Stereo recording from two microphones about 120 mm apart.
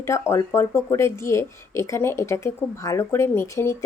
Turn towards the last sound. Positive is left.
turn(degrees=20)  # may be behind; listen again after turning